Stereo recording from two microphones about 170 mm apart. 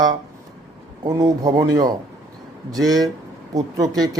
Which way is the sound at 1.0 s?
20° right (ahead or behind).